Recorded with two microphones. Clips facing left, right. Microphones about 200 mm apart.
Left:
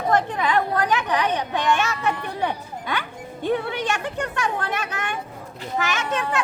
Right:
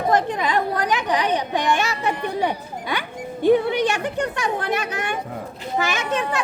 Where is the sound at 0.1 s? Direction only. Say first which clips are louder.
Even; 15° right (ahead or behind).